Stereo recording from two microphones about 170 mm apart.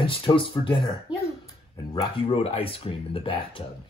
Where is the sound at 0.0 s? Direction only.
30° left (ahead or behind).